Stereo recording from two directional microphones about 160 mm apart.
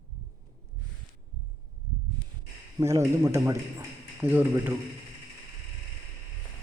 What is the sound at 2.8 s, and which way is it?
Speech, 20° right (ahead or behind).